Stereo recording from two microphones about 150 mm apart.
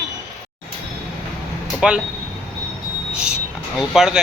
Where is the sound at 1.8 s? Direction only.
5° right (ahead or behind).